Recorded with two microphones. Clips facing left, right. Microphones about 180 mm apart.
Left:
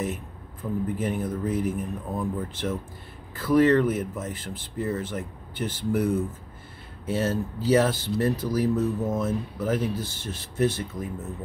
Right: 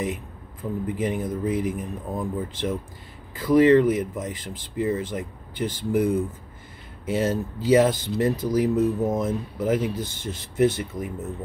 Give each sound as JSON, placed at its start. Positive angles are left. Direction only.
{"t": 0.8, "sound": "speech", "side_deg": -10}
{"t": 7.1, "sound": "speech", "side_deg": -15}